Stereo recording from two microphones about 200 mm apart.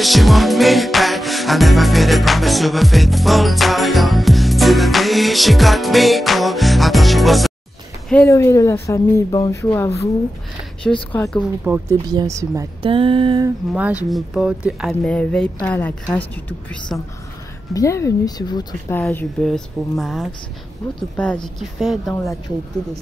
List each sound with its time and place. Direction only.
0.0 s music: centre (ahead or behind)
8.1 s speech: 10° left (ahead or behind)
11.1 s speech: 5° left (ahead or behind)
11.6 s speech: 10° right (ahead or behind)
12.9 s a sound: 25° right (ahead or behind)
13.7 s speech: 5° right (ahead or behind); by 18.9 s 20° left (ahead or behind)
18.9 s speech: 5° left (ahead or behind)
21.5 s speech: centre (ahead or behind)